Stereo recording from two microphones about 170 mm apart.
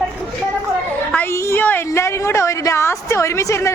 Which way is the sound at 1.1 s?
10° left (ahead or behind).